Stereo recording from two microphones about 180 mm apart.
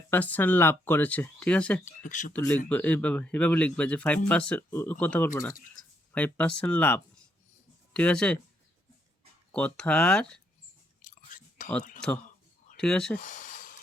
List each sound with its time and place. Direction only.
0.1 s speech: 10° left (ahead or behind)
1.8 s speech: 45° left (ahead or behind)
2.3 s speech: 10° left (ahead or behind)
9.5 s speech: 5° left (ahead or behind)
11.0 s chewing: 45° left (ahead or behind)
12.7 s speech: 5° left (ahead or behind)
13.1 s a sound: 45° left (ahead or behind)